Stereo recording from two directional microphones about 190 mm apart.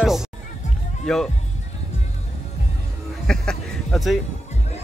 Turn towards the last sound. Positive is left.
turn(degrees=0)  # may be behind; listen again after turning